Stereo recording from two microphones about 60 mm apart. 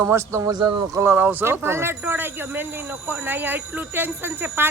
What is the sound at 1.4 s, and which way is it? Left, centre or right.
Speech, right.